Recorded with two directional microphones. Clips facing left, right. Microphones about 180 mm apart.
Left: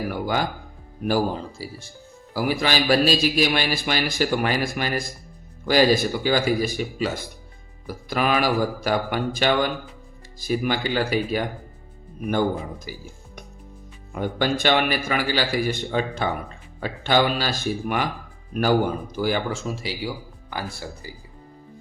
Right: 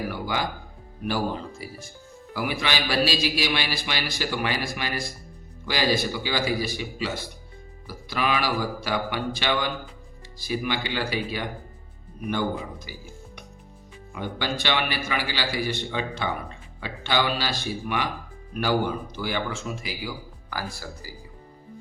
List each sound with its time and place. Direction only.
0.1 s a man's voice: 45° left (ahead or behind)
14.1 s a man's voice: 45° left (ahead or behind); by 21.1 s 25° left (ahead or behind)